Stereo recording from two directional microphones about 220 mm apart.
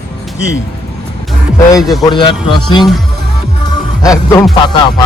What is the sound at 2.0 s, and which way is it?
Speech, 20° left (ahead or behind).